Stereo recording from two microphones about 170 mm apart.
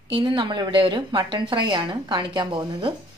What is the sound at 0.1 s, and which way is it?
A woman's voice, 30° right (ahead or behind).